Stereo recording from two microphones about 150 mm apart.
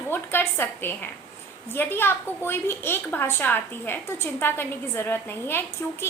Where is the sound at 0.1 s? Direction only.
15° left (ahead or behind).